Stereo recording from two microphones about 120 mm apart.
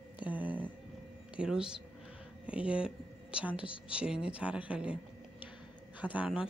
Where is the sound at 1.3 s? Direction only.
10° right (ahead or behind).